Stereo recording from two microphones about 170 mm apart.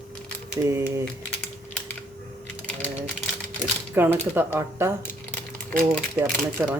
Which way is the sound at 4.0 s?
10° right (ahead or behind).